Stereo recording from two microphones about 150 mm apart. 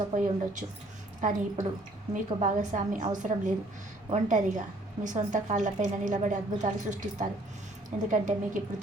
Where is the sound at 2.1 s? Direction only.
55° right (ahead or behind).